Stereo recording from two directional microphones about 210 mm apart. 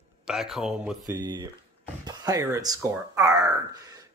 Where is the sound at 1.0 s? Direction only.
20° right (ahead or behind).